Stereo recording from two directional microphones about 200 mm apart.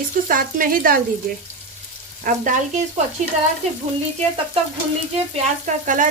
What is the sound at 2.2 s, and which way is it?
Stir, 40° right (ahead or behind).